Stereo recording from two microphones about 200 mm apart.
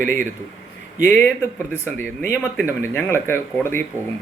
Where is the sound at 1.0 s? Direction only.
10° left (ahead or behind).